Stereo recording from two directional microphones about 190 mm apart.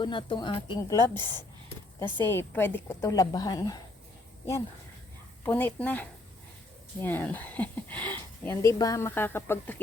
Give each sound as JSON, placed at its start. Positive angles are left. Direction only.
{"t": 0.0, "sound": "speech", "side_deg": 25}
{"t": 1.1, "sound": "speech", "side_deg": -25}
{"t": 2.0, "sound": "speech", "side_deg": 15}
{"t": 5.5, "sound": "speech", "side_deg": 10}